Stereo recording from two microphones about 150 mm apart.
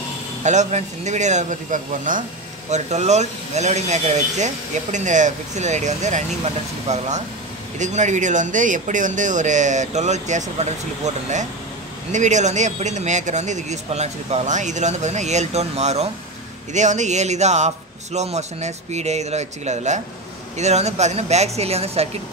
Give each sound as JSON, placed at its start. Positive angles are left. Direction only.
{"t": 0.4, "sound": "speech", "side_deg": -50}
{"t": 2.7, "sound": "speech", "side_deg": -50}
{"t": 12.1, "sound": "speech", "side_deg": -55}